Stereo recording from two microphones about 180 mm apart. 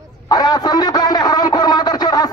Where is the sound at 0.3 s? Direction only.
20° left (ahead or behind).